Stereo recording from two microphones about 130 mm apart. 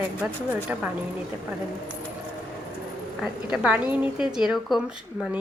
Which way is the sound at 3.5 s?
10° right (ahead or behind).